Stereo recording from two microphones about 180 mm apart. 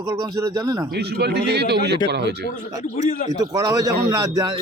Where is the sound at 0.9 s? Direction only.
65° right (ahead or behind).